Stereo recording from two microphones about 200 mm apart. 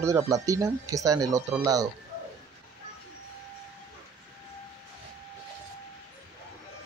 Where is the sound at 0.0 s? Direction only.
15° right (ahead or behind).